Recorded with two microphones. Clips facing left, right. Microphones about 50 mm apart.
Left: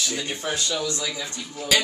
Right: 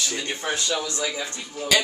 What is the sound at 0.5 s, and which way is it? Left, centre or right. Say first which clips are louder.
Speech: even; right.